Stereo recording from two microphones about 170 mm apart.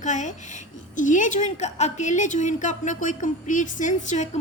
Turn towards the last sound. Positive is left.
turn(degrees=45)  # may be behind; listen again after turning